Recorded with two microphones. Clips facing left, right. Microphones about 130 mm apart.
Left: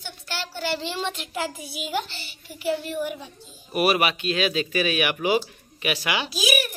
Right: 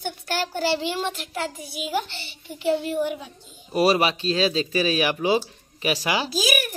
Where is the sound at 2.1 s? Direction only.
25° right (ahead or behind).